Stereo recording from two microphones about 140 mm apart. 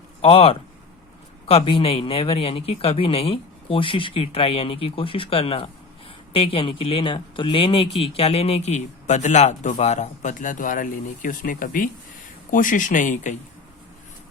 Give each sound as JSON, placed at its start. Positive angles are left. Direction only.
{"t": 0.2, "sound": "speech", "side_deg": 45}